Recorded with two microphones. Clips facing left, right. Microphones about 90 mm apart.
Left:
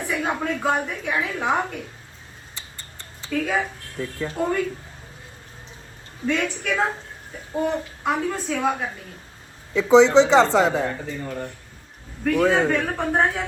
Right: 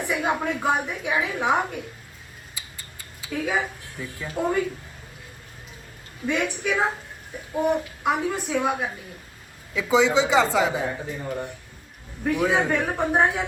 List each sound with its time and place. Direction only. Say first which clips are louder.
0.0 s a woman's voice: right 1 dB; 15° right (ahead or behind)
2.6 s a sound: left 1 dB; 5° right (ahead or behind)
3.9 s a woman's voice: left 4 dB; 15° right (ahead or behind)
6.2 s a woman's voice: left 1 dB; 15° right (ahead or behind)